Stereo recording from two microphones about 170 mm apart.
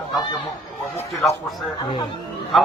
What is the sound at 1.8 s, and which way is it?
Speech, 25° left (ahead or behind).